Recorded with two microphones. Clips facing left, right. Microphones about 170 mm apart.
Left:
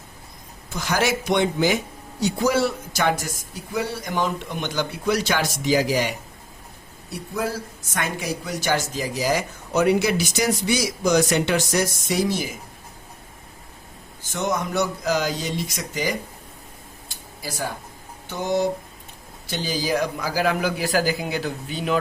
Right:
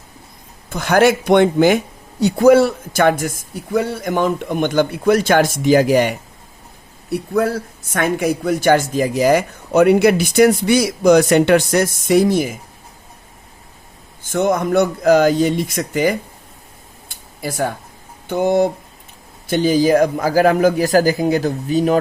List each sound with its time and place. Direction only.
0.7 s speech: 60° right (ahead or behind)
14.2 s speech: 55° right (ahead or behind)
17.1 s a sound: 60° right (ahead or behind)
18.3 s speech: 55° right (ahead or behind)